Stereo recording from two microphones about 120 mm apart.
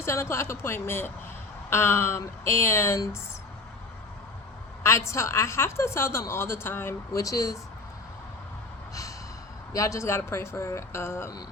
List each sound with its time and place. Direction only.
0.0 s a woman's voice: 20° left (ahead or behind)
4.8 s a woman's voice: 25° left (ahead or behind)
9.7 s a woman's voice: 25° left (ahead or behind)